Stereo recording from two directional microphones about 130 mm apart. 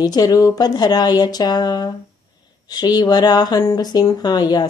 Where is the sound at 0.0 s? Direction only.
30° left (ahead or behind).